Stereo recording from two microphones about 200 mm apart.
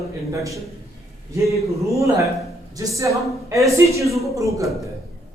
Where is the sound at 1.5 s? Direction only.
15° right (ahead or behind).